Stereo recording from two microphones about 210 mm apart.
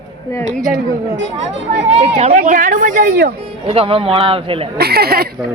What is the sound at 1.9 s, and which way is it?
Speech, 30° right (ahead or behind).